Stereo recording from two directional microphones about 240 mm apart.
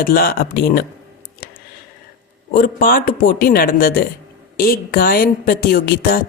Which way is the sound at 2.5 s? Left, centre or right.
Left.